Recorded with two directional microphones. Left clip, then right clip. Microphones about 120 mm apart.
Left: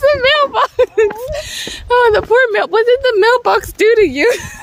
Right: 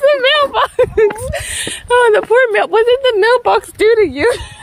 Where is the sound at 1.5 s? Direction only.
5° right (ahead or behind).